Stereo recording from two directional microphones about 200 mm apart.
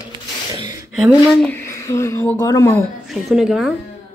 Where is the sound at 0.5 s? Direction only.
20° right (ahead or behind).